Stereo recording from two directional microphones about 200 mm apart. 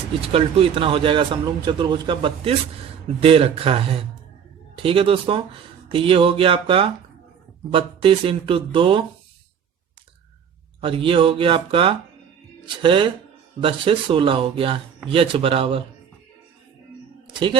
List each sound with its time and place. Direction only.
0.2 s a man's voice: 30° right (ahead or behind)
10.8 s a man's voice: 25° right (ahead or behind)